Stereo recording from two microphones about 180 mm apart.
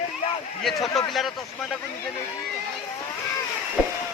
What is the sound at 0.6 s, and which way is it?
Speech, centre (ahead or behind).